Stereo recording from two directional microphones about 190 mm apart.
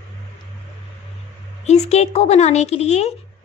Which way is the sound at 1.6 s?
35° left (ahead or behind).